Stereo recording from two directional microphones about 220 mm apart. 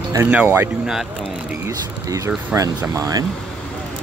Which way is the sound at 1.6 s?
15° right (ahead or behind).